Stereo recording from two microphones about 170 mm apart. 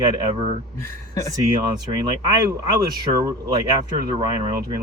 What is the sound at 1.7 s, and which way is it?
Speech, 25° right (ahead or behind).